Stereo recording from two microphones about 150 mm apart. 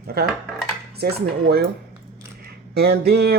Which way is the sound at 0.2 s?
90° right.